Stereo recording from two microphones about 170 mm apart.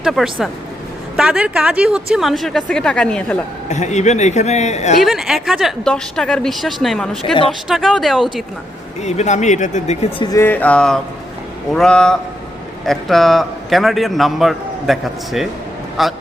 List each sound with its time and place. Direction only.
0.0 s a man's voice: centre (ahead or behind)
3.7 s speech: 45° left (ahead or behind)
4.9 s a man's voice: centre (ahead or behind)
9.0 s speech: 40° left (ahead or behind)
10.3 s a man's voice: 10° left (ahead or behind)